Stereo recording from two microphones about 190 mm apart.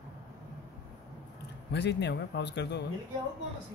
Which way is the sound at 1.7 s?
65° left (ahead or behind).